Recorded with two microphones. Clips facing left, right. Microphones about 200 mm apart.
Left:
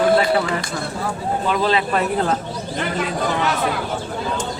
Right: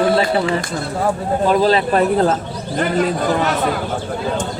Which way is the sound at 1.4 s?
40° right (ahead or behind).